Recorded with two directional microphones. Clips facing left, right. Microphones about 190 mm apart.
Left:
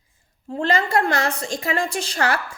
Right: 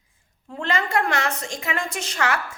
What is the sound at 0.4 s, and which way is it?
A woman's voice, 35° left (ahead or behind).